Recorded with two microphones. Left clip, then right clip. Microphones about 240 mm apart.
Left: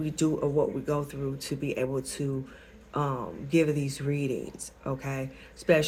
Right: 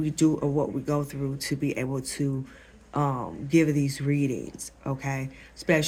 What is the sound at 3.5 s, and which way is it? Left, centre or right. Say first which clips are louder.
Speech: right 2 dB; right.